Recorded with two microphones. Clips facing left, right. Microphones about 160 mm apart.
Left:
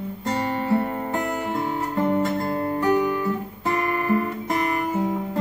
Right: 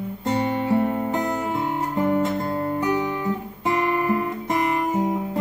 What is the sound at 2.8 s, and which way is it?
Guitar, 20° right (ahead or behind).